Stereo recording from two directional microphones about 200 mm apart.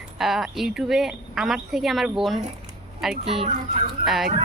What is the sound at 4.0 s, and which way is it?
Speech, centre (ahead or behind).